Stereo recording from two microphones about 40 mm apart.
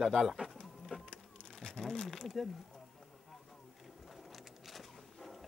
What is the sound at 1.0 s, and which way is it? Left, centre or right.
Music, left.